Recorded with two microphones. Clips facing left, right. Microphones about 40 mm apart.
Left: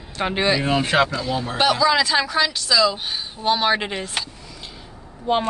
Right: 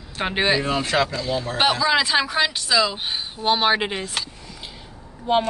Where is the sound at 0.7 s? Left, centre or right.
Left.